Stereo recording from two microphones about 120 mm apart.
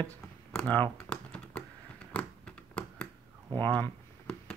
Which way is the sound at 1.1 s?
10° left (ahead or behind).